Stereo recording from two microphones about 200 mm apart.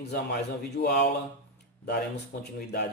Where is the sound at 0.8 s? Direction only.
55° left (ahead or behind).